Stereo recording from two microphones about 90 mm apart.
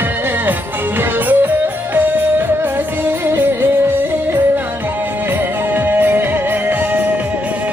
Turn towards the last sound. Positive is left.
turn(degrees=-20)  # may be behind; listen again after turning